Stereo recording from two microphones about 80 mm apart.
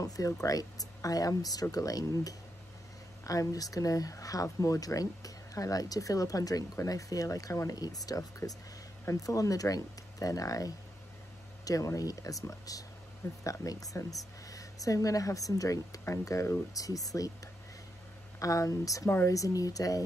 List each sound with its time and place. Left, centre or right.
0.0 s speech: left
18.4 s speech: left